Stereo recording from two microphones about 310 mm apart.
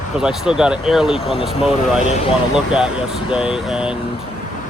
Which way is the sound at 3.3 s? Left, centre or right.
Centre.